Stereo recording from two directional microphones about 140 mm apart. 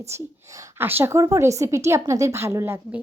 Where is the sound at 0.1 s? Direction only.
15° right (ahead or behind).